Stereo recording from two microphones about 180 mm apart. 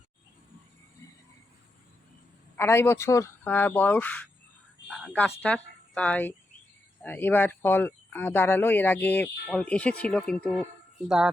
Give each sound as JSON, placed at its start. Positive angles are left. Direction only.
{"t": 2.6, "sound": "speech", "side_deg": 15}
{"t": 4.9, "sound": "speech", "side_deg": 0}